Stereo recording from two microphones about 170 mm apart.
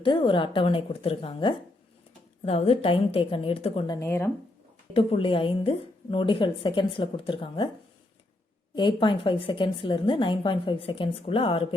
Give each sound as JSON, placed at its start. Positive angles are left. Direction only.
{"t": 0.0, "sound": "a woman's voice", "side_deg": 30}
{"t": 4.9, "sound": "a woman's voice", "side_deg": 30}
{"t": 8.7, "sound": "a woman's voice", "side_deg": 30}